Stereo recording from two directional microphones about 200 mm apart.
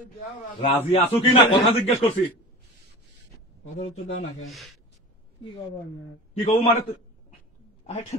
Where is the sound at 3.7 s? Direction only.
35° left (ahead or behind).